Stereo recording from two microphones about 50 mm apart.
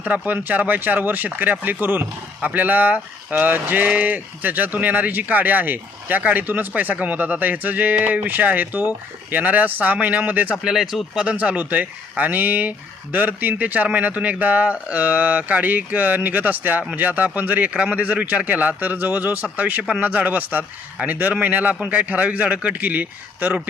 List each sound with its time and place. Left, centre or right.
0.0 s speech: right
10.5 s speech: centre
11.3 s a man's voice: right
22.8 s speech: right